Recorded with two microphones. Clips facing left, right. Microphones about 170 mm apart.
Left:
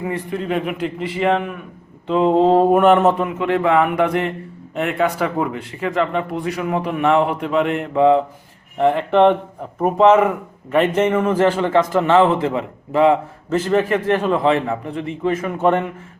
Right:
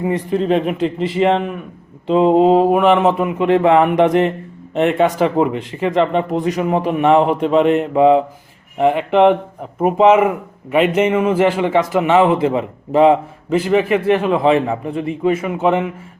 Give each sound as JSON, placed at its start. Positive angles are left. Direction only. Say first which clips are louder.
{"t": 0.0, "sound": "a man's voice", "louder": "right 6 dB", "side_deg": -20}
{"t": 3.2, "sound": "a man's voice", "louder": "right 5 dB", "side_deg": -20}